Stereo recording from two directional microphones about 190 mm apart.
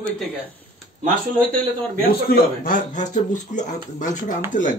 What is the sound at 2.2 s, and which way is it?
A man's voice, 45° left (ahead or behind).